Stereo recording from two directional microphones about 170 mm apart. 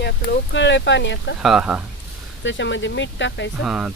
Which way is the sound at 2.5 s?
90° left.